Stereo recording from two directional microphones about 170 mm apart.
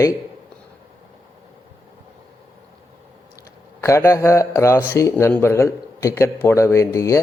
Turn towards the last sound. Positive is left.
turn(degrees=20)  # may be behind; listen again after turning